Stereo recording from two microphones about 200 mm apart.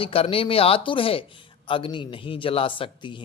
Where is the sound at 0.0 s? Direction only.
25° left (ahead or behind).